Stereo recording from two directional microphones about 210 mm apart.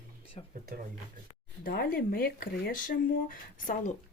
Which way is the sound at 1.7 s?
45° left (ahead or behind).